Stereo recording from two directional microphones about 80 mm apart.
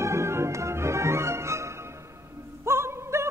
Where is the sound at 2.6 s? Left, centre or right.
Right.